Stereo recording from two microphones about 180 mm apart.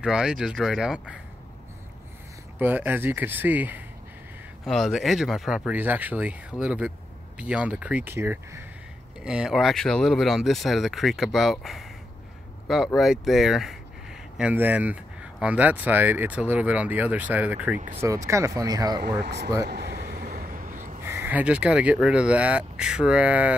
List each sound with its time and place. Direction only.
0.0 s speech: 5° right (ahead or behind)
2.6 s speech: 10° right (ahead or behind)
17.7 s speech: 45° right (ahead or behind)
18.0 s speech: 15° right (ahead or behind)
19.0 s speech: 70° right (ahead or behind)
19.7 s a sound: 60° right (ahead or behind); by 21.0 s 45° right (ahead or behind)
21.0 s speech: 15° right (ahead or behind)